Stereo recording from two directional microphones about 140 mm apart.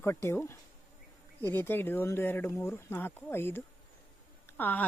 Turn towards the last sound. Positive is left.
turn(degrees=10)  # may be behind; listen again after turning